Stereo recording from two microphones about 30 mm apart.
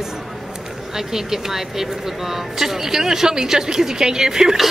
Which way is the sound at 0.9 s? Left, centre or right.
Centre.